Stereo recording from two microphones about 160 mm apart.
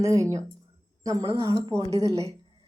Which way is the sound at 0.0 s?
20° right (ahead or behind).